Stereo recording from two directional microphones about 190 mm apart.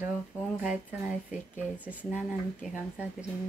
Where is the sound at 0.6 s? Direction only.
5° right (ahead or behind).